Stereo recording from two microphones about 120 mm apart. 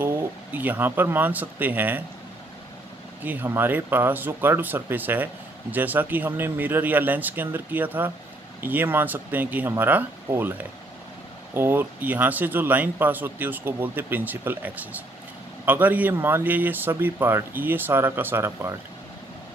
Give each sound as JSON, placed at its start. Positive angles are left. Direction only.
{"t": 0.0, "sound": "speech", "side_deg": -15}
{"t": 3.3, "sound": "speech", "side_deg": -15}